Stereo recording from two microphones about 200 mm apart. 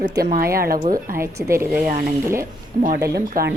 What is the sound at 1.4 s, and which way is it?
Speech, 15° right (ahead or behind).